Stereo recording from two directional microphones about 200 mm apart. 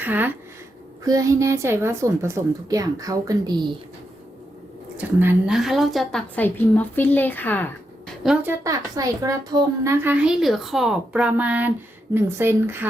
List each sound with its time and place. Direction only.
0.0 s speech: 10° right (ahead or behind)
4.9 s a woman's voice: 10° right (ahead or behind)